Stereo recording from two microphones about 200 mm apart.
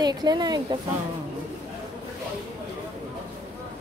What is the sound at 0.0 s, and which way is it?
Speech, 20° right (ahead or behind).